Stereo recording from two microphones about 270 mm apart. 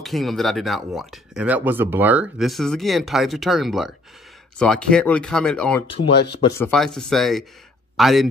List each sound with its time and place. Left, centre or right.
0.0 s speech: centre
5.9 s speech: left
6.6 s speech: centre